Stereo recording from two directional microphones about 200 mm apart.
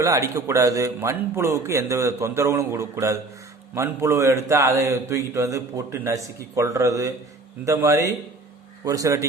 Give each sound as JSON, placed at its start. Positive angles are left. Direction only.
{"t": 0.0, "sound": "speech", "side_deg": -15}